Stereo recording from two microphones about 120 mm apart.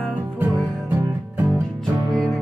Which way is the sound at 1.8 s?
Centre (ahead or behind).